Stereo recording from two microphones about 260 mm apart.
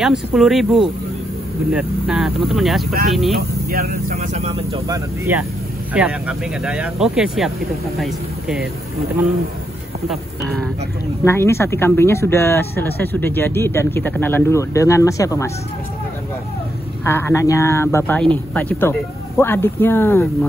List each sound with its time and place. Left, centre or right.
0.0 s speech: centre
3.6 s speech: right; by 5.4 s centre
5.9 s speech: centre
10.0 s speech: centre
17.0 s speech: centre